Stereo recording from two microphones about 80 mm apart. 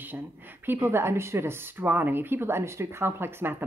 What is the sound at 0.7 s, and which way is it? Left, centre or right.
Speech, right.